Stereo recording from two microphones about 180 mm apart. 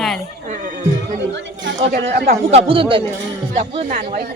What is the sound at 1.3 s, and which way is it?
A woman's voice, 75° right (ahead or behind).